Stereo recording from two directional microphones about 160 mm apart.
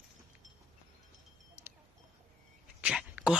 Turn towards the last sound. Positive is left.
turn(degrees=-5)  # may be behind; listen again after turning